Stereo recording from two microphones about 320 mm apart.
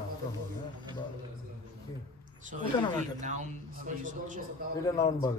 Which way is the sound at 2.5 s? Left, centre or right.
Right.